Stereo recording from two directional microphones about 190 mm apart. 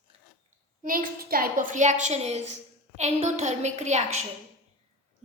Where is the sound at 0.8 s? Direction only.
45° right (ahead or behind).